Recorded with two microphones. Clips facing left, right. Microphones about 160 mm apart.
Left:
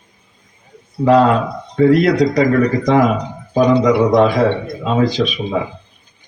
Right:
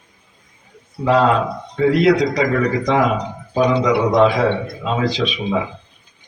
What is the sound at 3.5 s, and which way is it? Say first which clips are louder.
A man's voice: left 4 dB; 45° left (ahead or behind).